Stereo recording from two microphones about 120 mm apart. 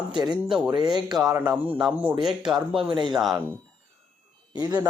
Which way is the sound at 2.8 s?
45° right (ahead or behind).